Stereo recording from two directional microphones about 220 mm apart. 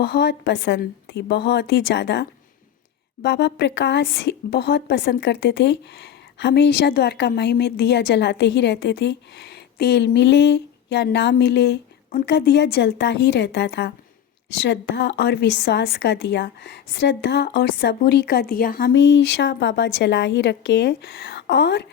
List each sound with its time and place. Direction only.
0.0 s a woman's voice: 50° left (ahead or behind)
3.2 s a woman's voice: 50° left (ahead or behind)